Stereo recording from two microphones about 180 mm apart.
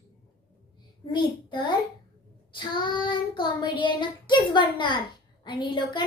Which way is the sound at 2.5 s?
25° left (ahead or behind).